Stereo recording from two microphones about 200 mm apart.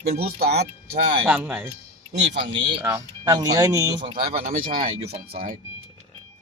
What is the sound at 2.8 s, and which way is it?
Speech, 15° right (ahead or behind).